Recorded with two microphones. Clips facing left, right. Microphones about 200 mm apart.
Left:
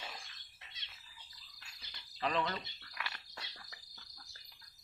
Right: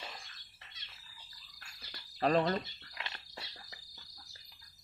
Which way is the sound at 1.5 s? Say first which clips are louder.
Right 5 dB; 50° right (ahead or behind).